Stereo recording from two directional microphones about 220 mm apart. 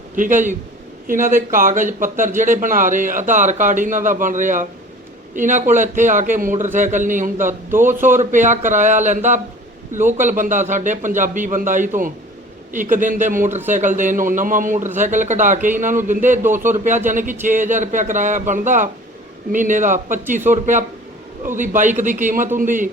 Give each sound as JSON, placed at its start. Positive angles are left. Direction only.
{"t": 0.2, "sound": "speech", "side_deg": -35}